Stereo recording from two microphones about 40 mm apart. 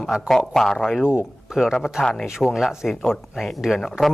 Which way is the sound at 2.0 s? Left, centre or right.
Centre.